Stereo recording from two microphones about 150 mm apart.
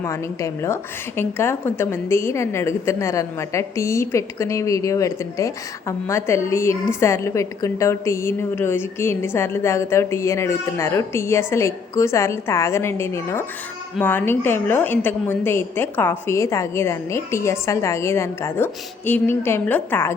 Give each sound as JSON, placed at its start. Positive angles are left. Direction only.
{"t": 0.0, "sound": "a woman's voice", "side_deg": 20}